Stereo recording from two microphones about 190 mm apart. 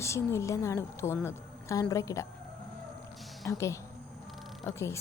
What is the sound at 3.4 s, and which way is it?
A woman's voice, 15° left (ahead or behind).